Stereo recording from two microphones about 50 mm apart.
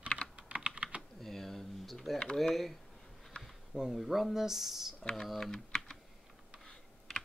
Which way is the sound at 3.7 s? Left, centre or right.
Centre.